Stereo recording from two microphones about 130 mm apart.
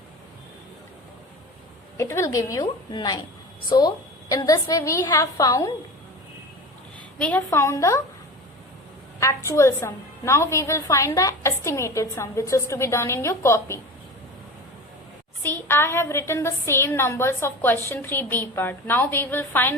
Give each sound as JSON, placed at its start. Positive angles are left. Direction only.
{"t": 2.0, "sound": "a woman's voice", "side_deg": 25}
{"t": 7.2, "sound": "a woman's voice", "side_deg": 10}
{"t": 9.2, "sound": "a woman's voice", "side_deg": 25}
{"t": 15.4, "sound": "a woman's voice", "side_deg": 15}